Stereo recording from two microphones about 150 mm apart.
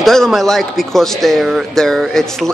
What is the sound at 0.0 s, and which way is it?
Speech, centre (ahead or behind).